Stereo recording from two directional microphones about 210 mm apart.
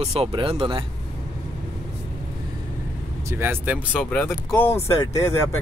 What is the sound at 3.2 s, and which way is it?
Speech, 10° right (ahead or behind).